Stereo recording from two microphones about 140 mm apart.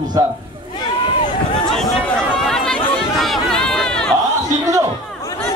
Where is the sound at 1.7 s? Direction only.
Centre (ahead or behind).